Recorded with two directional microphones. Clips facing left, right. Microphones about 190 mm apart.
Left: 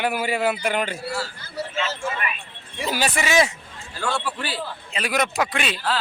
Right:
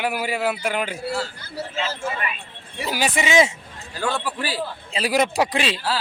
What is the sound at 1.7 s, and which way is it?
Speech, 30° right (ahead or behind).